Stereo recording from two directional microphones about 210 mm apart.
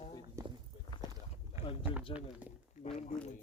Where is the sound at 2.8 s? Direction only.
35° left (ahead or behind).